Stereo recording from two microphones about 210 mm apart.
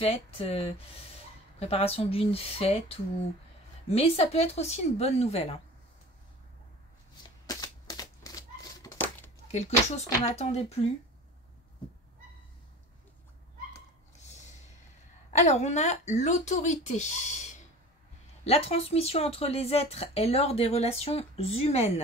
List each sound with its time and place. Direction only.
0.0 s speech: 30° left (ahead or behind)
7.4 s typewriter: 20° left (ahead or behind)
9.5 s speech: 30° left (ahead or behind)
15.3 s speech: 35° left (ahead or behind)